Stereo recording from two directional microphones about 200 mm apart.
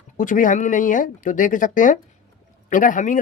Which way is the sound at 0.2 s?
40° left (ahead or behind).